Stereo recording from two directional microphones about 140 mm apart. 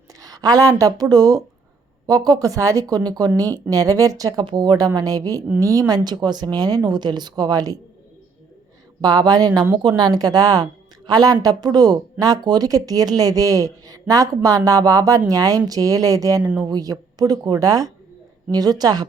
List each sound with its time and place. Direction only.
0.2 s speech: 25° right (ahead or behind)
9.0 s speech: 30° right (ahead or behind)